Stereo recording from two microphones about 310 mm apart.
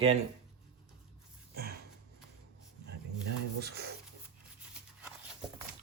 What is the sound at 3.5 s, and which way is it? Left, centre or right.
Speech, right.